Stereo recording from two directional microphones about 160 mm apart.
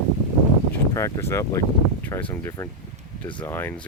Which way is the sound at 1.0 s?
20° left (ahead or behind).